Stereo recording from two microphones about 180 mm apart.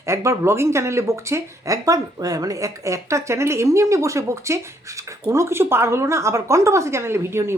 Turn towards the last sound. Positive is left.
turn(degrees=-15)  # may be behind; listen again after turning